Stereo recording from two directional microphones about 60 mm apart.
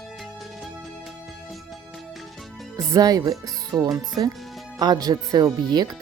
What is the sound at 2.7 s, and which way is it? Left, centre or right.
Speech, right.